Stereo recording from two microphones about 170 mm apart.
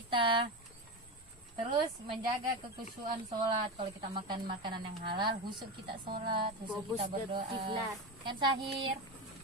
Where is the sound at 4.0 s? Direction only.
30° right (ahead or behind).